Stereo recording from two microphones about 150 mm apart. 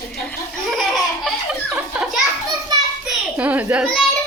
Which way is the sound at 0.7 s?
Centre (ahead or behind).